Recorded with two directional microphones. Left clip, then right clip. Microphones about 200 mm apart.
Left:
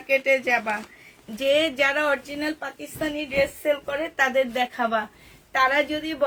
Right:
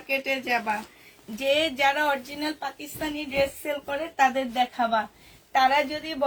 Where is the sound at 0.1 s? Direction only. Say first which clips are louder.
Left 5 dB; 30° left (ahead or behind).